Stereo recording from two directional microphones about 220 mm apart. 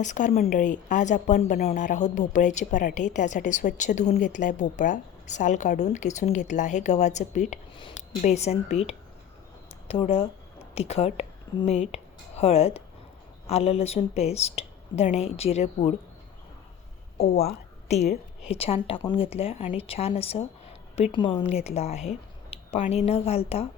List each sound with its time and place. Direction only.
0.0 s a woman's voice: 35° left (ahead or behind)
17.3 s a woman's voice: 30° left (ahead or behind)